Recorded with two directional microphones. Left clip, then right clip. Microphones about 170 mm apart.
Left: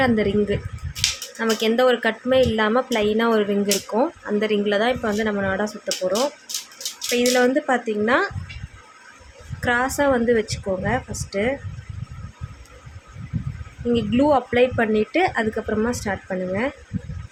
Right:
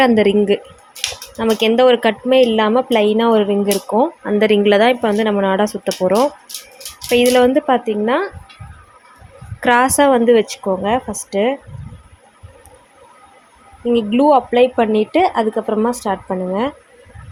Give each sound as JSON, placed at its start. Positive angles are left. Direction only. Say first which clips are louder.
{"t": 0.0, "sound": "a woman's voice", "louder": "right 7 dB", "side_deg": -35}
{"t": 4.2, "sound": "a woman's voice", "louder": "right 8 dB", "side_deg": -35}
{"t": 7.3, "sound": "a woman's voice", "louder": "right 6 dB", "side_deg": -30}
{"t": 9.6, "sound": "a woman's voice", "louder": "right 8 dB", "side_deg": -40}
{"t": 13.9, "sound": "a woman's voice", "louder": "right 6 dB", "side_deg": -20}